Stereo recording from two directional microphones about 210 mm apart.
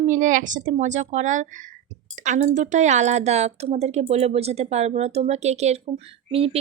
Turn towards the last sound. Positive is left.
turn(degrees=-25)  # may be behind; listen again after turning